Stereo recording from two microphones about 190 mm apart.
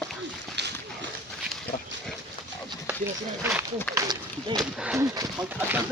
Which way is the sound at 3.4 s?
10° right (ahead or behind).